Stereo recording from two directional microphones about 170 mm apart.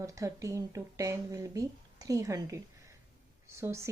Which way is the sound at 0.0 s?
20° right (ahead or behind).